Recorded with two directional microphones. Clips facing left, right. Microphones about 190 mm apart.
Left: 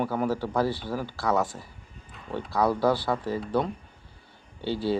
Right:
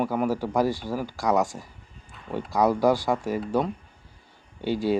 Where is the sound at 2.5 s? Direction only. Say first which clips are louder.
Right 3 dB; 15° right (ahead or behind).